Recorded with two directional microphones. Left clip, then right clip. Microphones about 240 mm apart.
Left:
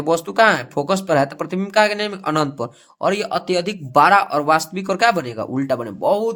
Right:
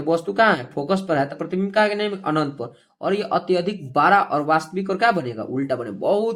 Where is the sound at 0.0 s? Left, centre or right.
Left.